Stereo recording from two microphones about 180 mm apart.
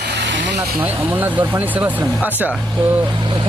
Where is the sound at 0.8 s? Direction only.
10° right (ahead or behind).